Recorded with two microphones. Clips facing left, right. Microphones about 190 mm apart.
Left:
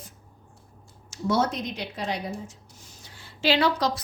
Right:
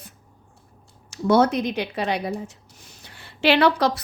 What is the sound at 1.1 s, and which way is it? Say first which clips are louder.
Speech: right 7 dB; 65° right (ahead or behind).